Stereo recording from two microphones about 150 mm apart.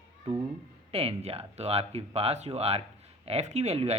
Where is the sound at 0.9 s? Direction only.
40° right (ahead or behind).